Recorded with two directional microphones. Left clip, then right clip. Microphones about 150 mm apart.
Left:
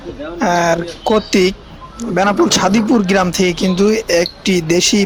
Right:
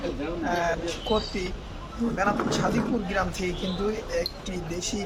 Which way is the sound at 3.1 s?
90° left.